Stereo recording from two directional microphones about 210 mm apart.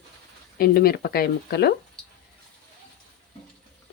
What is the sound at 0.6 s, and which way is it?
Speech, 45° left (ahead or behind).